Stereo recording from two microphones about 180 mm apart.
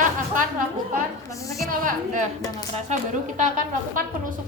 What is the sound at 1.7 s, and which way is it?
Speech, 45° right (ahead or behind).